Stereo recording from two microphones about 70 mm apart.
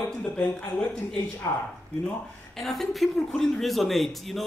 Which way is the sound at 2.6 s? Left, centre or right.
Centre.